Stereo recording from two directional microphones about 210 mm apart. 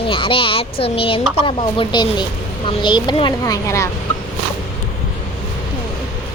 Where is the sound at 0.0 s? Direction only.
25° left (ahead or behind).